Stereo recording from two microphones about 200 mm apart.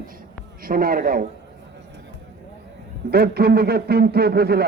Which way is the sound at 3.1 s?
50° right (ahead or behind).